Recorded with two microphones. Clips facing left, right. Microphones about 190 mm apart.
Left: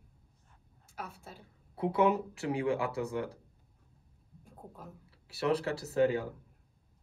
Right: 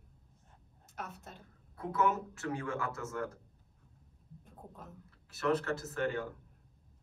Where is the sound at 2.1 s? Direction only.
15° left (ahead or behind).